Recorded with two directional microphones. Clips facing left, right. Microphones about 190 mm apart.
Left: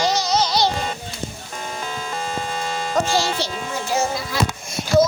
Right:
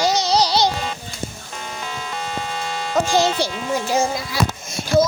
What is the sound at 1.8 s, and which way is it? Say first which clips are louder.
Music: left 1 dB; 40° left (ahead or behind).